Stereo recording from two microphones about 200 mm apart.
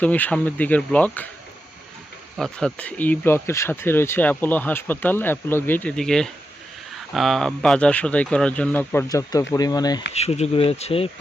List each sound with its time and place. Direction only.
0.0 s speech: 5° left (ahead or behind)
2.4 s speech: 5° left (ahead or behind); by 10.0 s 20° left (ahead or behind)
10.2 s speech: 30° left (ahead or behind)